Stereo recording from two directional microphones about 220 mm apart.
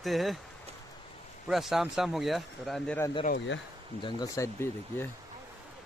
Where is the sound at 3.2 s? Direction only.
55° left (ahead or behind).